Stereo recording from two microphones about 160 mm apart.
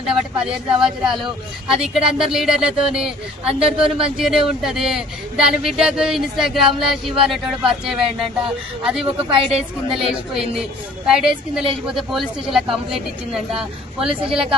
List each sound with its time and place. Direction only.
0.0 s speech: 5° right (ahead or behind)
9.0 s a woman's voice: 30° right (ahead or behind)
10.3 s speech: 5° right (ahead or behind)